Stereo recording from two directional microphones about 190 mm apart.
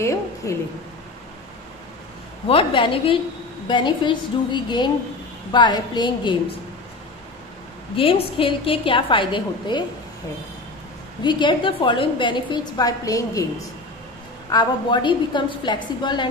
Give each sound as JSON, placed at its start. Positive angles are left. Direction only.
{"t": 0.0, "sound": "a woman's voice", "side_deg": 15}
{"t": 2.4, "sound": "a woman's voice", "side_deg": 30}
{"t": 7.9, "sound": "a woman's voice", "side_deg": 30}
{"t": 11.2, "sound": "a woman's voice", "side_deg": 25}